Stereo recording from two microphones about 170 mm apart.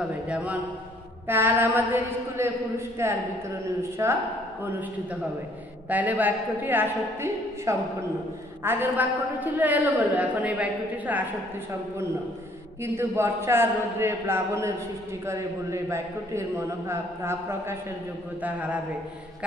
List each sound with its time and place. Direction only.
0.3 s a man's voice: 10° right (ahead or behind)
5.9 s a man's voice: 10° right (ahead or behind)
12.8 s a man's voice: 15° right (ahead or behind)